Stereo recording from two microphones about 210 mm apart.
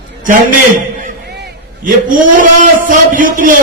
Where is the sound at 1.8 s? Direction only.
40° right (ahead or behind).